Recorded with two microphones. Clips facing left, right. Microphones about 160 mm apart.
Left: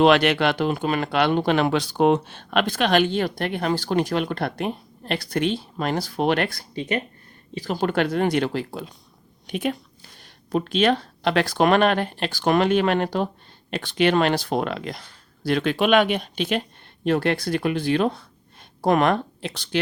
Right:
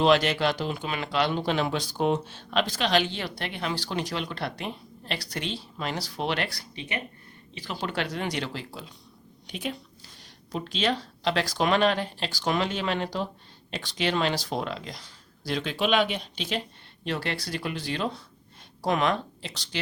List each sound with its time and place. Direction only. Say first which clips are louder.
0.0 s speech: left 5 dB; 65° left (ahead or behind)